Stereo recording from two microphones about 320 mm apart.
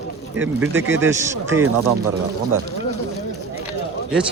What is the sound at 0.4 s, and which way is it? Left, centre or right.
A man's voice, centre.